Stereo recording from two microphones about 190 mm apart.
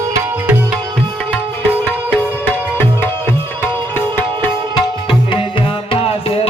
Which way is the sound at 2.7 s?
10° left (ahead or behind).